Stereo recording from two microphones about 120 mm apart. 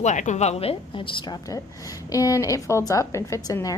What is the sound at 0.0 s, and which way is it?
A woman's voice, 85° left.